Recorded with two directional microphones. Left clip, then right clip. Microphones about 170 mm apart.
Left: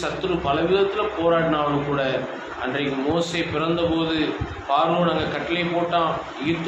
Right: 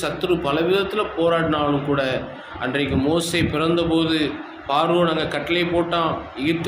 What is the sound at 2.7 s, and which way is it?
Speech, 65° right (ahead or behind).